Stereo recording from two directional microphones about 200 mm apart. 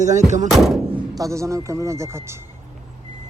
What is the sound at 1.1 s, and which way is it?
Speech, 15° right (ahead or behind).